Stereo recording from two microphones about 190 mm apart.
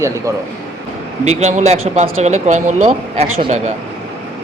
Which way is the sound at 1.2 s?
35° right (ahead or behind).